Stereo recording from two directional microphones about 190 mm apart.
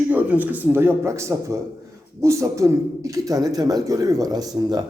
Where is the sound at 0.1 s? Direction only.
10° right (ahead or behind).